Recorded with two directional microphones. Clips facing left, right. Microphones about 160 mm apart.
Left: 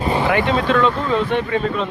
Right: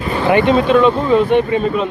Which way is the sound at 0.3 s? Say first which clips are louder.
Right 9 dB; 20° right (ahead or behind).